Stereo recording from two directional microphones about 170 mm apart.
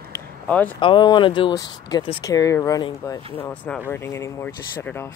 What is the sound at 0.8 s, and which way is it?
Speech, 25° left (ahead or behind).